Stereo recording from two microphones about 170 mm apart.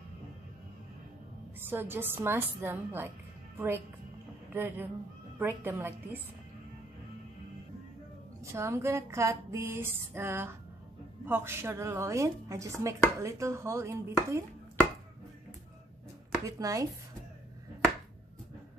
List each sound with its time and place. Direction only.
1.6 s a woman's voice: 15° right (ahead or behind)
8.5 s speech: 15° right (ahead or behind)
16.4 s speech: 20° right (ahead or behind)